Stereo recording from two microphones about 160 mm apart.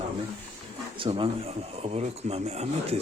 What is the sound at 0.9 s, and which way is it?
Speech, 35° right (ahead or behind).